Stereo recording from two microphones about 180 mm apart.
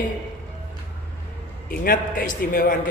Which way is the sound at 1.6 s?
50° left (ahead or behind).